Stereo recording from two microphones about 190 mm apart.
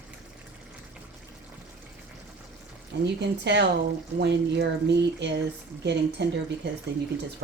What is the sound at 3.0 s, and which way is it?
Speech, 65° right (ahead or behind).